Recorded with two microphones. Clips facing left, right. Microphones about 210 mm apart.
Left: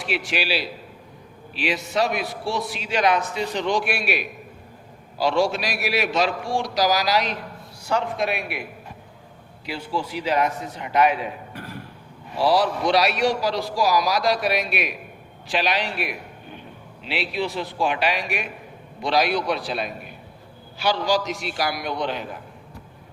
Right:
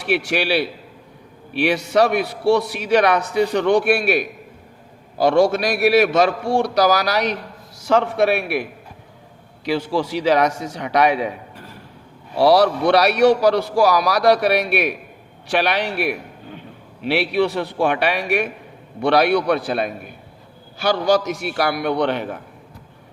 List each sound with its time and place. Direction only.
0.1 s a man's voice: 65° right (ahead or behind)
7.9 s a man's voice: 85° right
9.6 s a man's voice: 90° right; by 11.3 s 75° right (ahead or behind)
12.4 s a man's voice: 70° right (ahead or behind)